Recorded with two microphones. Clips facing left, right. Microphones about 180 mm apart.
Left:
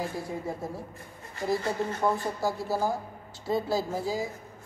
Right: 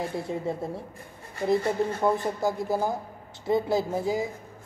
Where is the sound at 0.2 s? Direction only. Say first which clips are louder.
Right 4 dB; 25° right (ahead or behind).